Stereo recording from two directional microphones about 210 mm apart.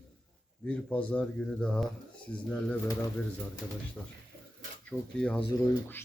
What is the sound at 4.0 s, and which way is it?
Speech, 5° left (ahead or behind).